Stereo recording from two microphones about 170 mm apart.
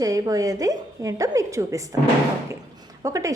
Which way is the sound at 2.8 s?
20° right (ahead or behind).